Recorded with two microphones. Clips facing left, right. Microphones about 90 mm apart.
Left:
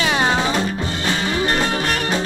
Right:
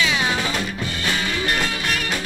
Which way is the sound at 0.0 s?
40° left (ahead or behind).